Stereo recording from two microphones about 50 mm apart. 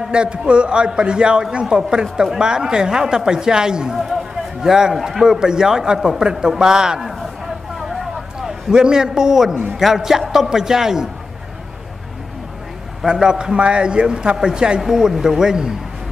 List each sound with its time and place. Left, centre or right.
0.1 s a man's voice: centre
7.9 s vehicle: centre
8.5 s a man's voice: centre
13.0 s speech: centre